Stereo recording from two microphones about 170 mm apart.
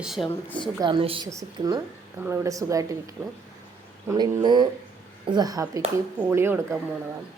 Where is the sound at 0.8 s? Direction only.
30° right (ahead or behind).